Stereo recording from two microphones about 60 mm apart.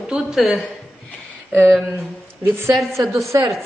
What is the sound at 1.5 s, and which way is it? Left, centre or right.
A woman's voice, right.